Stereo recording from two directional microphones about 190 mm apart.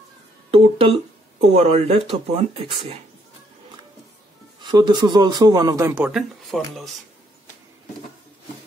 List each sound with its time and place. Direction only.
0.5 s speech: 30° right (ahead or behind)
4.6 s a man's voice: 25° right (ahead or behind)
6.0 s speech: centre (ahead or behind)